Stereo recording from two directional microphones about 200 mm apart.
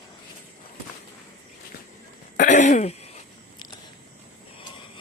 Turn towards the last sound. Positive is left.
turn(degrees=30)  # may be behind; listen again after turning